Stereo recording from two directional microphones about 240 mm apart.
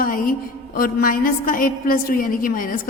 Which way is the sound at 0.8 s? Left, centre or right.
Left.